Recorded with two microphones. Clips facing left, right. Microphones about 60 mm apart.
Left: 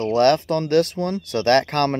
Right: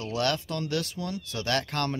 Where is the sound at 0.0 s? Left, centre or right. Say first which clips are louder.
Left 12 dB; left.